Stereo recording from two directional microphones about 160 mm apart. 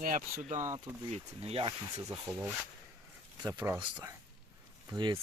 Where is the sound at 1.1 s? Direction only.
40° right (ahead or behind).